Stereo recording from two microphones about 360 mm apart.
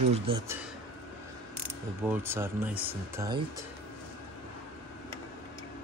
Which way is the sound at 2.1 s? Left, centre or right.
Centre.